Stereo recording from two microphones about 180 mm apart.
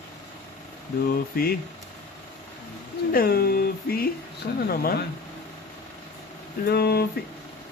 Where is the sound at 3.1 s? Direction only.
55° left (ahead or behind).